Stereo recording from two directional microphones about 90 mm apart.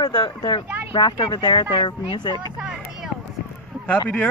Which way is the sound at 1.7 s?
65° left (ahead or behind).